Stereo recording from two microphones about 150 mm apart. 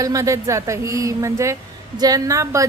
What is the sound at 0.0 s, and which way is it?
Speech, 20° right (ahead or behind).